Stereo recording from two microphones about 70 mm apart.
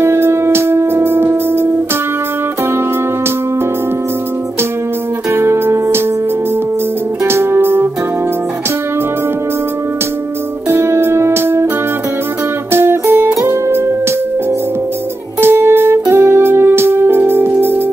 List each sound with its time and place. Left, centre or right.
0.0 s music: right
5.3 s music: right
7.2 s music: right
10.7 s music: right
12.7 s music: right
15.4 s music: right